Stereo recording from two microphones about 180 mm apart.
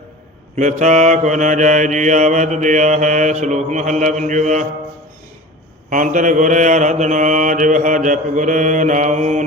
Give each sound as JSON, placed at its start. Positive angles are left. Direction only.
{"t": 0.5, "sound": "mantra", "side_deg": -40}
{"t": 5.9, "sound": "mantra", "side_deg": -45}